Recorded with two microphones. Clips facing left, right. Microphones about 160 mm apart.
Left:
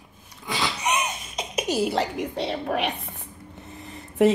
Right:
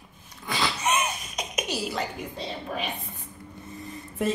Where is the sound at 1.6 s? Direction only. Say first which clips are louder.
Left 9 dB; 55° left (ahead or behind).